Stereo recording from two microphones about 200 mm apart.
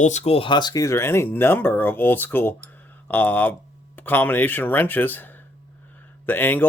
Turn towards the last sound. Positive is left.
turn(degrees=10)  # may be behind; listen again after turning